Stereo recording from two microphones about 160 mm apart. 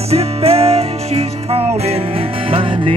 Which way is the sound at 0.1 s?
40° right (ahead or behind).